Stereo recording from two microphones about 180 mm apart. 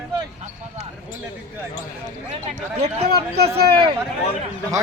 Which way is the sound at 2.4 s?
35° right (ahead or behind).